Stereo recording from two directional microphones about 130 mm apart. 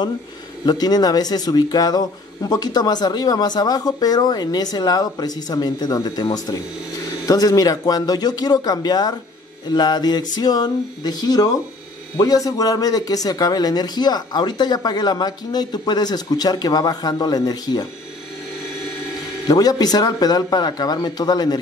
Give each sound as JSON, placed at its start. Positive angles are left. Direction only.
{"t": 0.7, "sound": "speech", "side_deg": 30}
{"t": 19.4, "sound": "speech", "side_deg": 30}